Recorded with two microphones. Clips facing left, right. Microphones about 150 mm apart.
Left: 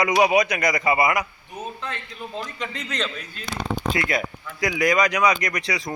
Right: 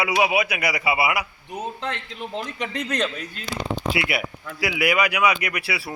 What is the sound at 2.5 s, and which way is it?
Speech, 60° right (ahead or behind).